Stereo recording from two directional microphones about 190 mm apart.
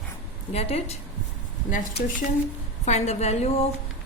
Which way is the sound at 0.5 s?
35° left (ahead or behind).